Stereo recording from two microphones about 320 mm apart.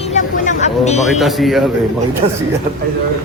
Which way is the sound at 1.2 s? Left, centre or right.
Centre.